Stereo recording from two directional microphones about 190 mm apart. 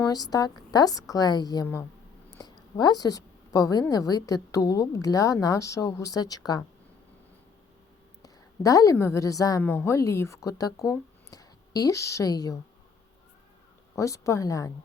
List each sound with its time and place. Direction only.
0.1 s a woman's voice: 20° left (ahead or behind)
8.2 s a woman's voice: 20° left (ahead or behind)
13.9 s a woman's voice: 15° left (ahead or behind)